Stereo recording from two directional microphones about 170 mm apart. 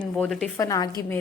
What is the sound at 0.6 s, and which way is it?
Speech, 20° left (ahead or behind).